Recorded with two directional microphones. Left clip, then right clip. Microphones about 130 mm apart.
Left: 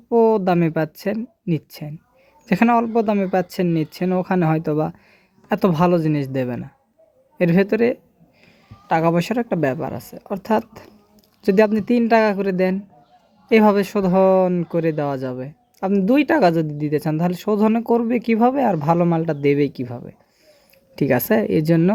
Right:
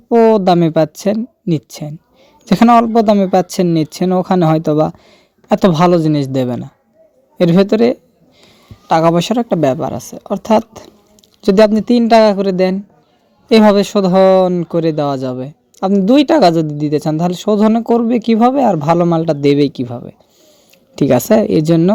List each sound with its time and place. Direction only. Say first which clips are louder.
0.1 s speech: right 7 dB; 35° right (ahead or behind)